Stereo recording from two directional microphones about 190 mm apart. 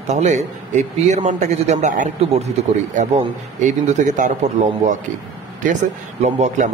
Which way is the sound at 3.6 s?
40° right (ahead or behind).